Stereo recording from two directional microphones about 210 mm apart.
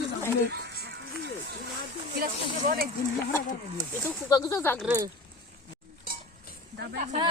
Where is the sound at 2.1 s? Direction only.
40° right (ahead or behind).